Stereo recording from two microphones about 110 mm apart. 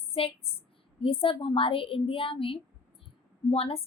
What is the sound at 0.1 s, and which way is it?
A woman's voice, 60° left (ahead or behind).